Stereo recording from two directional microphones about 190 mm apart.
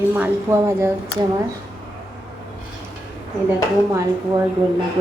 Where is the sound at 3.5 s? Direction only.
15° right (ahead or behind).